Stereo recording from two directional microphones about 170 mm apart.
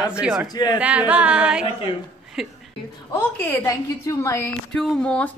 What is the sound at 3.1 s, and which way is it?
A woman's voice, 15° left (ahead or behind).